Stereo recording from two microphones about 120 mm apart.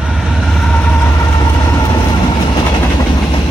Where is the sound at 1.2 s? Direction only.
30° left (ahead or behind).